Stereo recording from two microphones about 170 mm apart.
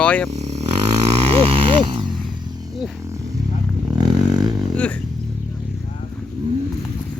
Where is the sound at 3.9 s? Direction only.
25° right (ahead or behind).